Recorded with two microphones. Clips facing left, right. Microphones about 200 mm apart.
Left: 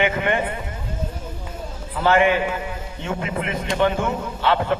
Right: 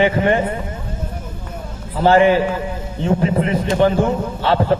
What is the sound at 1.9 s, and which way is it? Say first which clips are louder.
A man's voice: right 5 dB; 35° right (ahead or behind).